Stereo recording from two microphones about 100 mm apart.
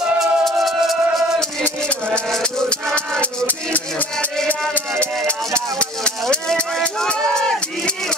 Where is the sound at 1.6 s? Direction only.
10° left (ahead or behind).